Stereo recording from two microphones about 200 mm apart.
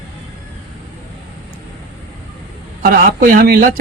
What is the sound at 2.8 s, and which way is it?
Speech, 45° right (ahead or behind).